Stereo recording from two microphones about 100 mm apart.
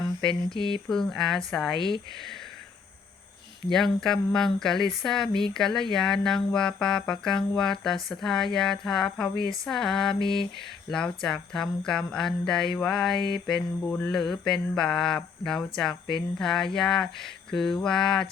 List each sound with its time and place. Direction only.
0.5 s mantra: 60° left (ahead or behind)
0.9 s speech: 5° left (ahead or behind)
3.7 s speech: 5° left (ahead or behind)
10.2 s mantra: 55° left (ahead or behind)
10.9 s speech: 5° left (ahead or behind)
13.1 s mantra: 55° left (ahead or behind)
13.5 s speech: 15° left (ahead or behind)